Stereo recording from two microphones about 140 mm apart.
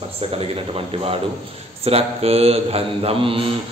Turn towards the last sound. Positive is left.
turn(degrees=-40)  # may be behind; listen again after turning